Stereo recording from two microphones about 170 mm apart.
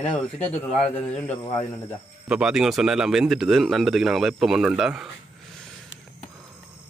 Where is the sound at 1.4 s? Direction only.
15° left (ahead or behind).